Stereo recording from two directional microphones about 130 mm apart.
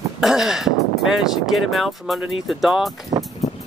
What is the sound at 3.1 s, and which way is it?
Vehicle, 30° right (ahead or behind).